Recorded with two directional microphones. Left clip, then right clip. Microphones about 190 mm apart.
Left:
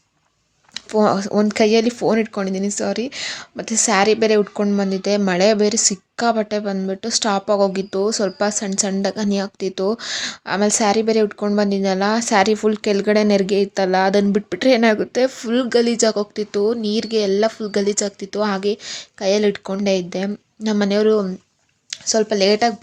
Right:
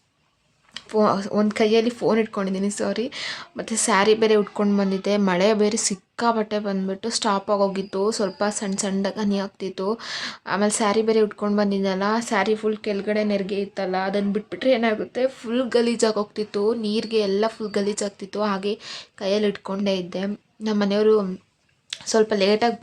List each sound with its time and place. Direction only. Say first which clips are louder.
0.7 s speech: left 3 dB; 20° left (ahead or behind)
21.8 s speech: left 1 dB; 5° left (ahead or behind)